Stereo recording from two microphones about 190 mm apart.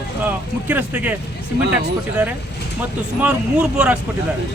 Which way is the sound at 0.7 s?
10° right (ahead or behind).